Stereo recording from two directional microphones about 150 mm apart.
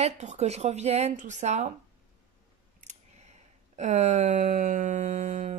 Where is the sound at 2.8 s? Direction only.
50° right (ahead or behind).